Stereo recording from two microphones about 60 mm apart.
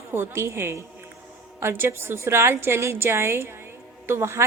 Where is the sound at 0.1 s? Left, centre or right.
Right.